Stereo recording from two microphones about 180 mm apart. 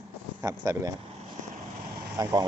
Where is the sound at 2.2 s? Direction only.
20° right (ahead or behind).